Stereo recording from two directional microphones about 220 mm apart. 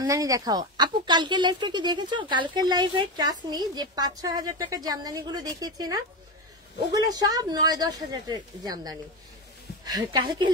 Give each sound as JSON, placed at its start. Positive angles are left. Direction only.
{"t": 0.0, "sound": "a woman's voice", "side_deg": -15}